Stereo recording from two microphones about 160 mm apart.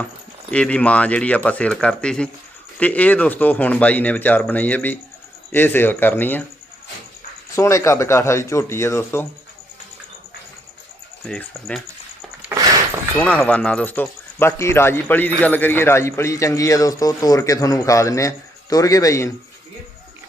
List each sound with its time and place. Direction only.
0.5 s speech: 5° left (ahead or behind)
7.5 s speech: 20° left (ahead or behind)
11.3 s speech: 10° left (ahead or behind)
12.5 s a sound: 20° right (ahead or behind)
13.1 s speech: 10° left (ahead or behind)